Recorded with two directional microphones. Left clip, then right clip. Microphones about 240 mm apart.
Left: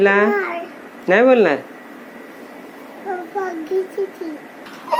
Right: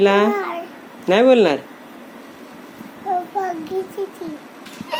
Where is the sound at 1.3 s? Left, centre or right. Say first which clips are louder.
Even; right.